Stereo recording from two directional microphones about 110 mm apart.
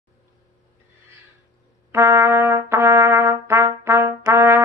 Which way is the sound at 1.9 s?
20° right (ahead or behind).